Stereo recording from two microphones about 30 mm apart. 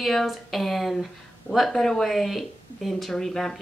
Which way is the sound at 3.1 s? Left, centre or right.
Centre.